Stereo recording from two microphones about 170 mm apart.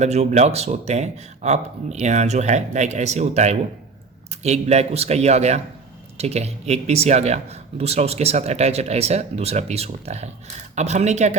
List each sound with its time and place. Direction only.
0.0 s speech: 40° right (ahead or behind)